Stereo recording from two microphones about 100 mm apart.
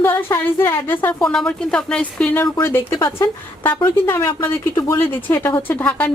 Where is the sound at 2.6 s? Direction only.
20° left (ahead or behind).